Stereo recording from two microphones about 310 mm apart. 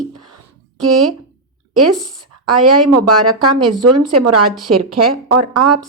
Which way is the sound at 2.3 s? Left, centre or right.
Right.